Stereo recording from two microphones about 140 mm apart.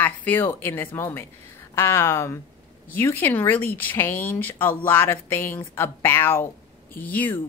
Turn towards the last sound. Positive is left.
turn(degrees=10)  # may be behind; listen again after turning